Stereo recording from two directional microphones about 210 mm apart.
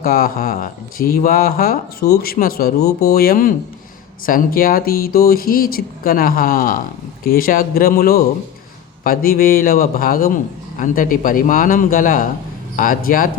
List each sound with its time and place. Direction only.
0.0 s a man's voice: 45° left (ahead or behind)